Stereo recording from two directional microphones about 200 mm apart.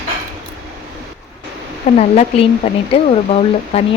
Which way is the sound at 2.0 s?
30° left (ahead or behind).